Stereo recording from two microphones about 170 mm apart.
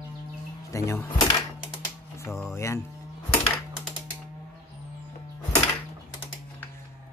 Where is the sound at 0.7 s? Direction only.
15° left (ahead or behind).